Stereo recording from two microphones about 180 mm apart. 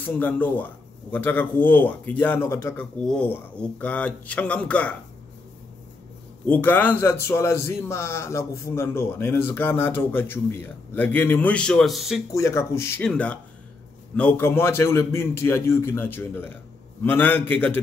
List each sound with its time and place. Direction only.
0.0 s a man's voice: 10° left (ahead or behind)
6.4 s a man's voice: 10° left (ahead or behind)
12.4 s a man's voice: 15° left (ahead or behind)